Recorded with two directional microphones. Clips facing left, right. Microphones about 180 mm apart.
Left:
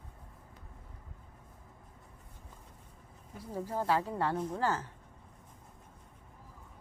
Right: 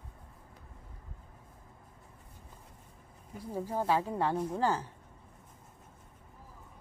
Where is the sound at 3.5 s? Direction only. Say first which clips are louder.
Right 1 dB; 10° right (ahead or behind).